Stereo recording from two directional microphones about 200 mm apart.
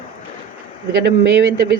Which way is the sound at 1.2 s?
60° right (ahead or behind).